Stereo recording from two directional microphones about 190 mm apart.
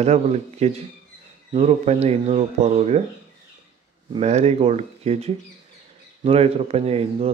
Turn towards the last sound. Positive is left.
turn(degrees=-35)  # may be behind; listen again after turning